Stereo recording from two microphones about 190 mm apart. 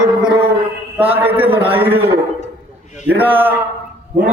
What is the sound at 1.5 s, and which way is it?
Speech, 30° right (ahead or behind).